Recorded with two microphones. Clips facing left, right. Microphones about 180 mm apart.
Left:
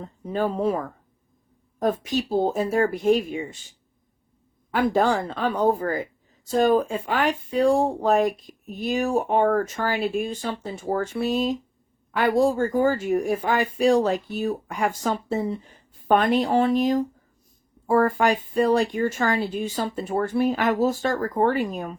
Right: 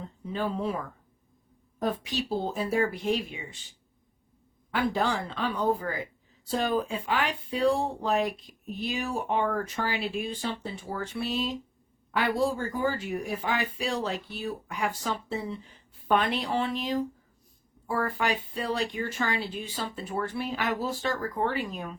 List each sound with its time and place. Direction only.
0.0 s a woman's voice: 45° left (ahead or behind)